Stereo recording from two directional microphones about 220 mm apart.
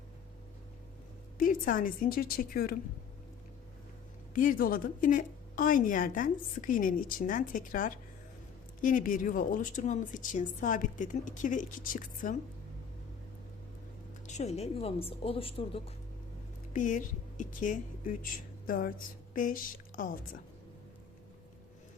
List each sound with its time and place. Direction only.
1.4 s a woman's voice: 40° left (ahead or behind)
4.4 s a woman's voice: 40° left (ahead or behind)
14.3 s a woman's voice: 30° left (ahead or behind)
16.7 s a woman's voice: 35° left (ahead or behind)